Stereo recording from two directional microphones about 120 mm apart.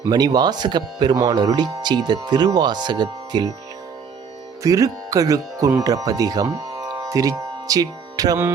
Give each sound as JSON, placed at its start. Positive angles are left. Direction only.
{"t": 0.1, "sound": "speech", "side_deg": -35}
{"t": 4.6, "sound": "speech", "side_deg": -30}